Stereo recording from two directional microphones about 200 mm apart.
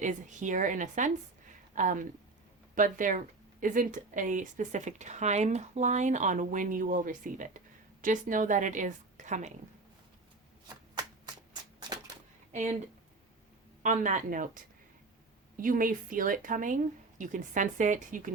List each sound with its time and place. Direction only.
0.0 s a woman's voice: 40° right (ahead or behind)
13.8 s a woman's voice: 40° right (ahead or behind)